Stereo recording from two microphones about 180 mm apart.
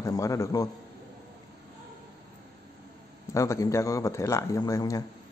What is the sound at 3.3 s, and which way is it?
A man's voice, 15° left (ahead or behind).